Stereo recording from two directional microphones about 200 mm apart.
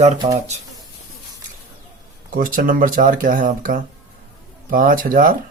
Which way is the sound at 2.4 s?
45° right (ahead or behind).